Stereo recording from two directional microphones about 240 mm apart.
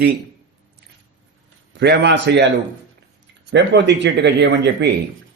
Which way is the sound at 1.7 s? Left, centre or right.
Right.